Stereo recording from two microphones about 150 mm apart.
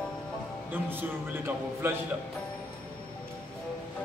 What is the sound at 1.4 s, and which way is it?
Speech, 15° right (ahead or behind).